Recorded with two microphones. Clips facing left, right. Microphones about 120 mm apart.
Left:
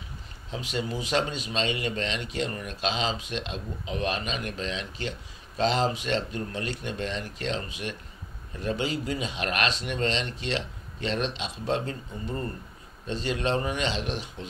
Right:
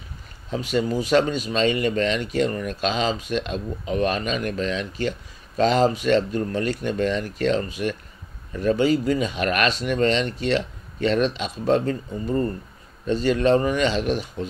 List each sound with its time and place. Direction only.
0.5 s speech: 45° right (ahead or behind)
13.0 s speech: 45° right (ahead or behind)